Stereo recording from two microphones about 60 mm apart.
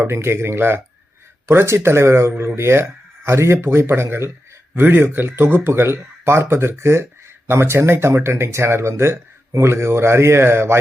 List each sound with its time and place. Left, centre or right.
0.0 s speech: right
4.8 s speech: right